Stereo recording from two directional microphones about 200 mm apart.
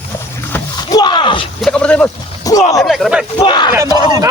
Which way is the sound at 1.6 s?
5° left (ahead or behind).